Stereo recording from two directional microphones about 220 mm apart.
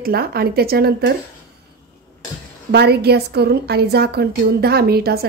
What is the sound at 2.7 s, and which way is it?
A woman's voice, 45° right (ahead or behind).